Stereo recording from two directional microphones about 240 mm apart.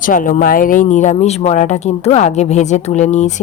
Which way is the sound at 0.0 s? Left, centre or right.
Left.